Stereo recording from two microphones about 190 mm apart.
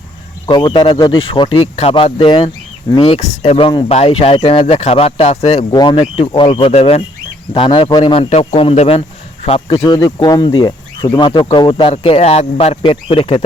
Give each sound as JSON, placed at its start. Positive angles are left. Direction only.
{"t": 0.4, "sound": "speech", "side_deg": 25}
{"t": 9.8, "sound": "speech", "side_deg": 20}